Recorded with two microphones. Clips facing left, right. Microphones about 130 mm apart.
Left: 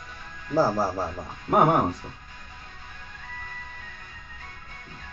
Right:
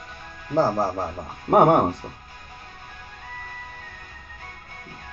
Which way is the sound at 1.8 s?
30° right (ahead or behind).